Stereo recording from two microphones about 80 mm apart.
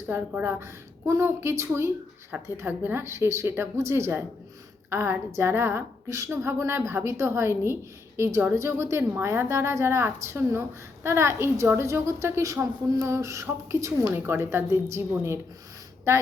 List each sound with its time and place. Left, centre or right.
0.1 s a woman's voice: right